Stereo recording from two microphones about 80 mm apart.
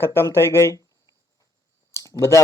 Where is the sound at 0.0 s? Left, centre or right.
Left.